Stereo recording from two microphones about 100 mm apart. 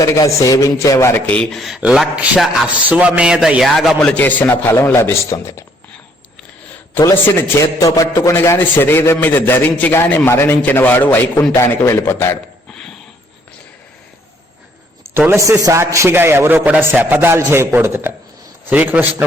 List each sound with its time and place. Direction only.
0.0 s a man's voice: 35° left (ahead or behind)
1.3 s a man's voice: 5° left (ahead or behind)
1.8 s a sound: 10° right (ahead or behind)
3.2 s a man's voice: 10° right (ahead or behind)
4.0 s a man's voice: 15° left (ahead or behind)
7.0 s a man's voice: 25° left (ahead or behind)
15.3 s a man's voice: 30° right (ahead or behind)